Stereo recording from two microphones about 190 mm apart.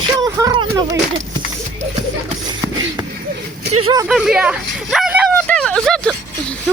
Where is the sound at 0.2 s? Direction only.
20° right (ahead or behind).